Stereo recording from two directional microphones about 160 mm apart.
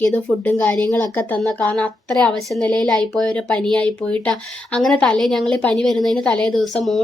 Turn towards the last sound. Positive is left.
turn(degrees=0)  # may be behind; listen again after turning